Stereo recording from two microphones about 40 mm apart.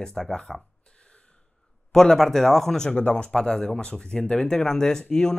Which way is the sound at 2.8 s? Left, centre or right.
Left.